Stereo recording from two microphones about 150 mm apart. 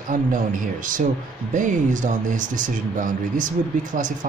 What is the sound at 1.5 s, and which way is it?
Speech, 55° right (ahead or behind).